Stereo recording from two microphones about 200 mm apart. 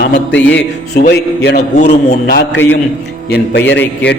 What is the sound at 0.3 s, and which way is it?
A man's voice, 60° left (ahead or behind).